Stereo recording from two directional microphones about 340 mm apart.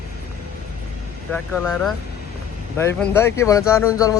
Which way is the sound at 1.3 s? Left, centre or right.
Centre.